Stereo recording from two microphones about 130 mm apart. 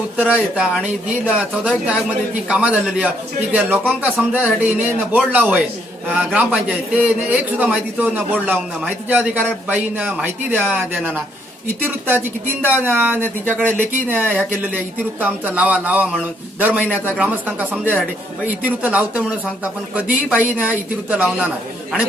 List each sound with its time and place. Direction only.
0.2 s speech: 10° right (ahead or behind)